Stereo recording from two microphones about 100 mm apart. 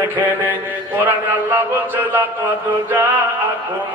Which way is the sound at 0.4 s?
15° right (ahead or behind).